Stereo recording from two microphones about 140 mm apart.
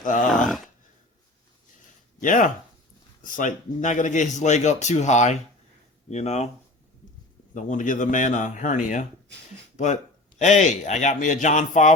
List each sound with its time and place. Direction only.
0.0 s a man's voice: 65° left (ahead or behind)
0.4 s speech: centre (ahead or behind)
2.2 s a man's voice: 70° left (ahead or behind); by 6.5 s 50° left (ahead or behind)
7.5 s a man's voice: 65° left (ahead or behind)